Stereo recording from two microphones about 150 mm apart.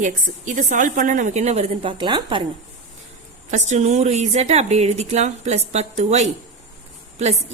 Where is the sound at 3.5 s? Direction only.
50° right (ahead or behind).